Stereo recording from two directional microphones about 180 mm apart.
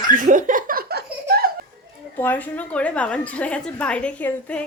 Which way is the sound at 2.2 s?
10° left (ahead or behind).